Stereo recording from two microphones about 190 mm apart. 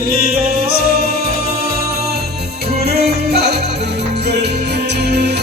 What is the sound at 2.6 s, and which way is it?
Music, 55° right (ahead or behind).